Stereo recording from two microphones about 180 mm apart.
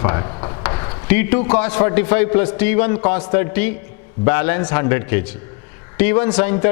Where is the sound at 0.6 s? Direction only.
20° left (ahead or behind).